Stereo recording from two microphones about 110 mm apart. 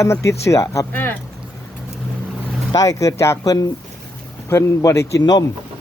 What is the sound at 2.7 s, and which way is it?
Speech, 30° left (ahead or behind).